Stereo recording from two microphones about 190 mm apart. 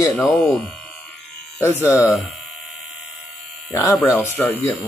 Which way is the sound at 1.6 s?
15° left (ahead or behind).